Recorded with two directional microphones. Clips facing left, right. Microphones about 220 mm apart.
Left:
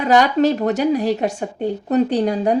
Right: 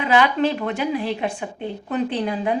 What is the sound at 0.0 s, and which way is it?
A woman's voice, 40° left (ahead or behind).